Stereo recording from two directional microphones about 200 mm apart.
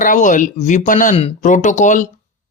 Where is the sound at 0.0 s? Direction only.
40° left (ahead or behind).